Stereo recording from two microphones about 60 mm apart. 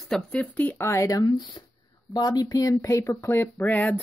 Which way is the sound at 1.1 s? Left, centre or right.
Left.